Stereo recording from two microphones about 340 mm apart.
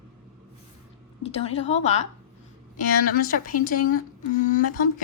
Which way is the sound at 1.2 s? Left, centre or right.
Centre.